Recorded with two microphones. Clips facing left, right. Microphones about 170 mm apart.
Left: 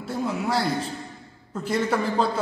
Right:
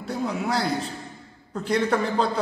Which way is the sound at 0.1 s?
Centre (ahead or behind).